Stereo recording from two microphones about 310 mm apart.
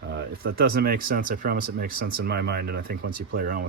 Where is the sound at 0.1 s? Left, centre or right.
Right.